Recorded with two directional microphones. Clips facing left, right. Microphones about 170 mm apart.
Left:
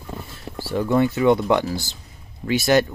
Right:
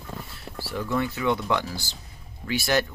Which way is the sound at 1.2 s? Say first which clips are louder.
Left 8 dB; 35° left (ahead or behind).